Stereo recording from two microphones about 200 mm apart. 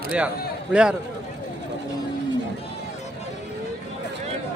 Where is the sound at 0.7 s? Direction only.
5° right (ahead or behind).